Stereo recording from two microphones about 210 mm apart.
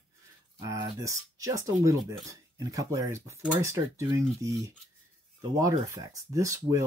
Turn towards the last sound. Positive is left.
turn(degrees=-15)  # may be behind; listen again after turning